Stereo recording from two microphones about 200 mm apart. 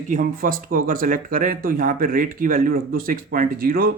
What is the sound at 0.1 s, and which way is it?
Speech, 45° right (ahead or behind).